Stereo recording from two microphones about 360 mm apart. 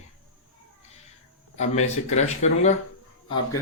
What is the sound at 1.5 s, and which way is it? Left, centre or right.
Speech, centre.